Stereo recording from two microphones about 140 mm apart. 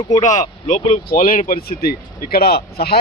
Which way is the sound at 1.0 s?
90° left.